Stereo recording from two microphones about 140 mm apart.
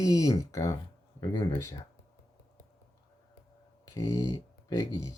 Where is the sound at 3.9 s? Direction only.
25° left (ahead or behind).